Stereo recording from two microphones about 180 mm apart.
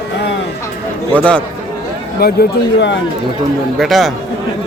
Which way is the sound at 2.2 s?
60° left (ahead or behind).